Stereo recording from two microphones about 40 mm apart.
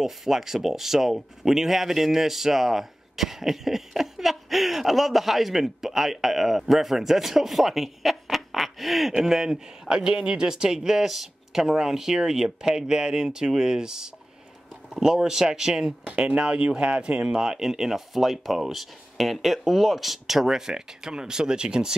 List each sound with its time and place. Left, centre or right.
0.0 s speech: centre
9.8 s speech: right
16.1 s speech: right; by 20.4 s centre
20.4 s speech: centre